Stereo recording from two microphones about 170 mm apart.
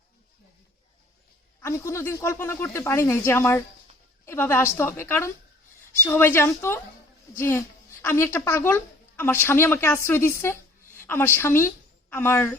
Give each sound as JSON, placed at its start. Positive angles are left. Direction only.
{"t": 1.6, "sound": "a woman's voice", "side_deg": 15}